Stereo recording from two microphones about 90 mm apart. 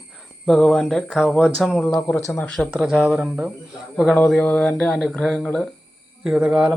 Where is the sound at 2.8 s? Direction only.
10° right (ahead or behind).